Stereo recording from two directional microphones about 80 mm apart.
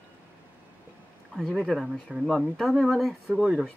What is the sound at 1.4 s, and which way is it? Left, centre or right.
Speech, centre.